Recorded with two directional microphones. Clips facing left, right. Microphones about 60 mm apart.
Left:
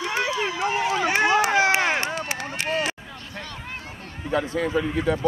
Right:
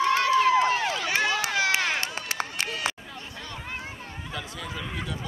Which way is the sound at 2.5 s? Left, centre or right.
Left.